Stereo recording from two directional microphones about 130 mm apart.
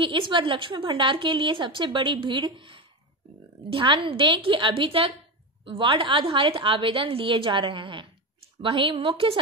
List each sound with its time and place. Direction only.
0.0 s a woman's voice: 40° right (ahead or behind)